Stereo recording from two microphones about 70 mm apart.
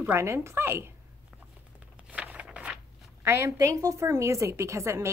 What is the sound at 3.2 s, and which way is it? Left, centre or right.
A woman's voice, right.